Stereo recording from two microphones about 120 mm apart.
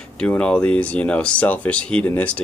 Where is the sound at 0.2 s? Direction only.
10° left (ahead or behind).